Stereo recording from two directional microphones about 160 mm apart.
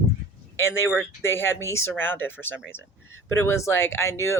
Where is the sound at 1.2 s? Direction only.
15° left (ahead or behind).